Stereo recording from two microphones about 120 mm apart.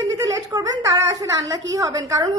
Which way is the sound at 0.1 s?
30° right (ahead or behind).